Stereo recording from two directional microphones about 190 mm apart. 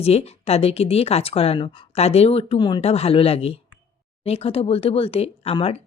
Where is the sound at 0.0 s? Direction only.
35° left (ahead or behind).